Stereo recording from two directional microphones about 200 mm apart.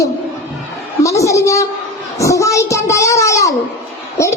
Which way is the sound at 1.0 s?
15° left (ahead or behind).